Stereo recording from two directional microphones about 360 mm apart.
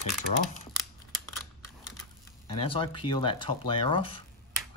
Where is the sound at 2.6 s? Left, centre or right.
Centre.